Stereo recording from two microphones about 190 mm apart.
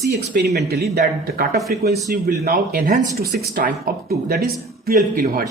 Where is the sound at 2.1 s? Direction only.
50° right (ahead or behind).